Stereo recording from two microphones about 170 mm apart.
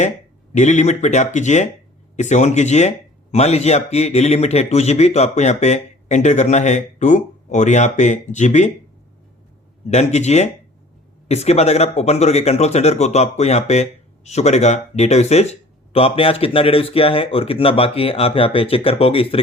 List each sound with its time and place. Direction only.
0.5 s a man's voice: 45° left (ahead or behind)
9.9 s speech: 40° left (ahead or behind)